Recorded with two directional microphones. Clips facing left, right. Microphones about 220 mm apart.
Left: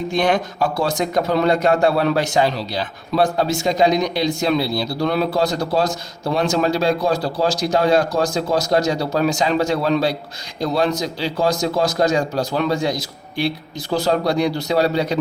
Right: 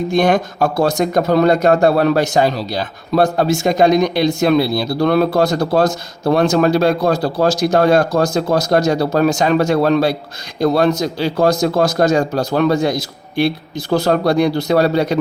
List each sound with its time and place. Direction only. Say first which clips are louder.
0.1 s a man's voice: right 4 dB; 45° right (ahead or behind)
13.9 s a man's voice: right 4 dB; 55° right (ahead or behind)